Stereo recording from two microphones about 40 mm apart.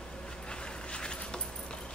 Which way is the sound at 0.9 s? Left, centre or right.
Left.